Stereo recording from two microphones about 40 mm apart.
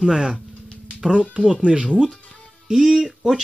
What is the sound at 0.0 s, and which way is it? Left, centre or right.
Speech, centre.